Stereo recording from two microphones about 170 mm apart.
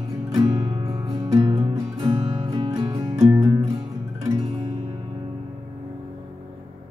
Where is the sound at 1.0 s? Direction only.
35° right (ahead or behind).